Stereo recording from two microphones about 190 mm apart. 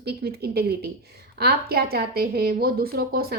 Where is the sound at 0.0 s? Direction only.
55° right (ahead or behind).